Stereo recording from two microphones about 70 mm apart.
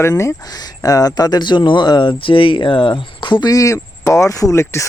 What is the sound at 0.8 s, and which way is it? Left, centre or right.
Speech, left.